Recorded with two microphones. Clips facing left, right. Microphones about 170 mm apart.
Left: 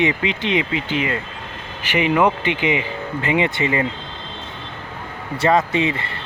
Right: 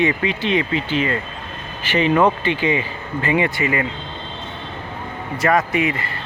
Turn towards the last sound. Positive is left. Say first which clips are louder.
# even
turn(degrees=25)  # may be behind; listen again after turning